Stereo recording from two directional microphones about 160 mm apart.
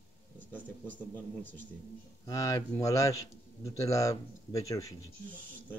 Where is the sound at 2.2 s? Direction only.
20° left (ahead or behind).